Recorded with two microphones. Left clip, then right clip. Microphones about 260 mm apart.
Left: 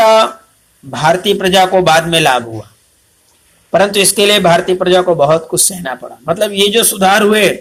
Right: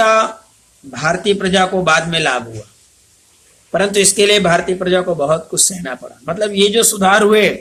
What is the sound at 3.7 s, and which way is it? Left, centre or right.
A man's voice, centre.